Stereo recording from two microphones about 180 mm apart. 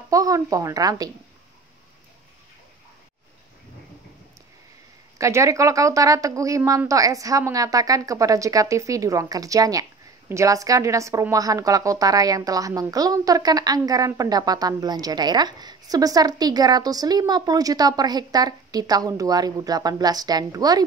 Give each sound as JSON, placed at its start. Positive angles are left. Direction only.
{"t": 0.1, "sound": "a woman's voice", "side_deg": -20}
{"t": 5.2, "sound": "a woman's voice", "side_deg": -15}